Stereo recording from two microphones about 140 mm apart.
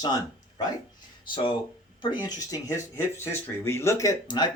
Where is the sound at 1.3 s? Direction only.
35° left (ahead or behind).